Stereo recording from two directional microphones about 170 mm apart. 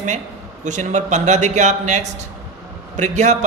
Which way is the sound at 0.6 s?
45° right (ahead or behind).